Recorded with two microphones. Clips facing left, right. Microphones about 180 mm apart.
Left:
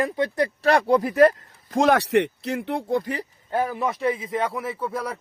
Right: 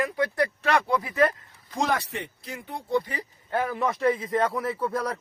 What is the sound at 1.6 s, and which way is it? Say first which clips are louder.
Speech: left 8 dB; 55° left (ahead or behind).